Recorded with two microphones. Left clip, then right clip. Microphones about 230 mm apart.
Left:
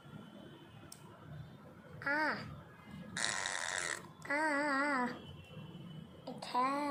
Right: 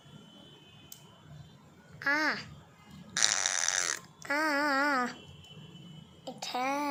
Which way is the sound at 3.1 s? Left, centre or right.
Right.